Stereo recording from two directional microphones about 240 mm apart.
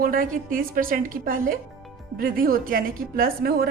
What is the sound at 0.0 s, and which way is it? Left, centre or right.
A woman's voice, right.